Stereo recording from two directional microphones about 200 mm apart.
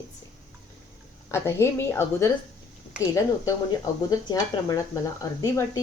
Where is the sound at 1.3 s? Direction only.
15° left (ahead or behind).